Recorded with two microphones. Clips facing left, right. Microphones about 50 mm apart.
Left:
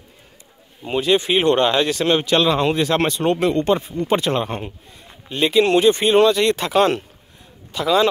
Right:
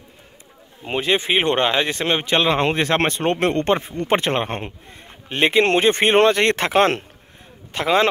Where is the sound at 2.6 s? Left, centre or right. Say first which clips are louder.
Left 1 dB; right.